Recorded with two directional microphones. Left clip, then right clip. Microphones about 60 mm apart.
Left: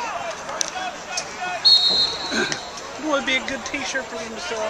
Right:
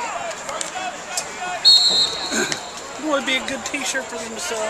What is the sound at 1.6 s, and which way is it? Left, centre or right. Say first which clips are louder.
Basketball bounce: right 2 dB; centre.